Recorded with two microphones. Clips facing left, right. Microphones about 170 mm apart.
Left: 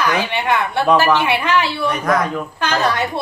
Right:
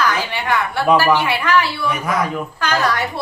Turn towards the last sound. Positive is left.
turn(degrees=20)  # may be behind; listen again after turning